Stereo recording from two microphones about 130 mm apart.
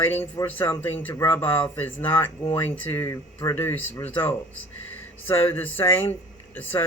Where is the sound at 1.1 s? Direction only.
25° left (ahead or behind).